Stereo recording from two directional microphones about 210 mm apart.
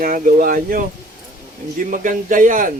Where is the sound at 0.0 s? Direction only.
40° right (ahead or behind).